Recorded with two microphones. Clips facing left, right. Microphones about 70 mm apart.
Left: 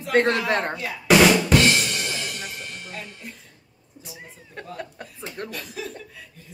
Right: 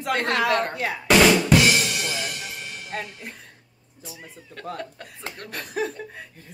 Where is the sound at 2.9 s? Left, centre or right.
Right.